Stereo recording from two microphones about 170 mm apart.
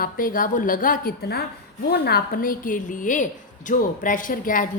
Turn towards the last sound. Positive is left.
turn(degrees=50)  # may be behind; listen again after turning